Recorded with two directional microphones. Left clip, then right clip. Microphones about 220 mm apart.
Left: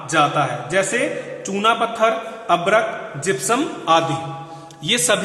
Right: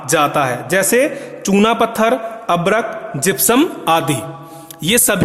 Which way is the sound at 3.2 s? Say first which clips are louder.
Right 6 dB; 50° right (ahead or behind).